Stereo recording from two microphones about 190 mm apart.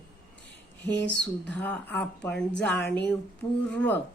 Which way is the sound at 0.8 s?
65° left (ahead or behind).